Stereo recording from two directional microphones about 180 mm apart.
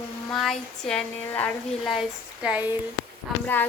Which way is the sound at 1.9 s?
5° right (ahead or behind).